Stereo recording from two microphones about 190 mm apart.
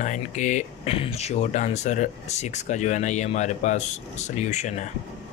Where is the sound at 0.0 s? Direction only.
40° left (ahead or behind).